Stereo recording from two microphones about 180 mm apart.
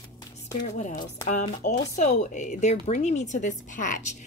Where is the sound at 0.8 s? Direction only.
45° left (ahead or behind).